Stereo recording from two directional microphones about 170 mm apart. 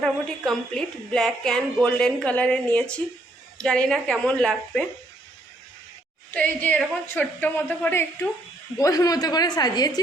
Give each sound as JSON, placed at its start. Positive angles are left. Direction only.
{"t": 0.0, "sound": "a woman's voice", "side_deg": 5}
{"t": 6.3, "sound": "a woman's voice", "side_deg": 10}